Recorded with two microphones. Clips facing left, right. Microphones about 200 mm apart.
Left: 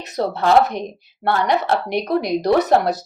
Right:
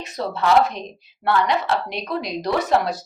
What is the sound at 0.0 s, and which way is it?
Speech, 65° left (ahead or behind).